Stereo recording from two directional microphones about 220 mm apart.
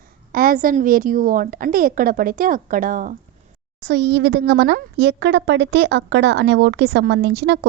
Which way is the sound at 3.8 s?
50° right (ahead or behind).